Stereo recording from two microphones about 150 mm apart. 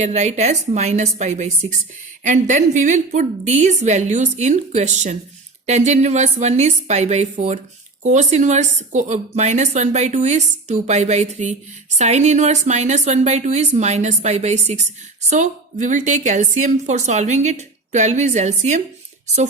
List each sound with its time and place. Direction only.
0.0 s a woman's voice: 50° right (ahead or behind)